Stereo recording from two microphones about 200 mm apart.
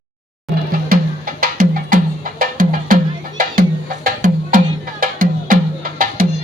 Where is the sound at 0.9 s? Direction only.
45° right (ahead or behind).